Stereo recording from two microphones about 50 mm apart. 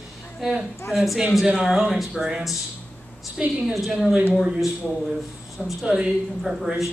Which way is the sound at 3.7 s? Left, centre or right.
Centre.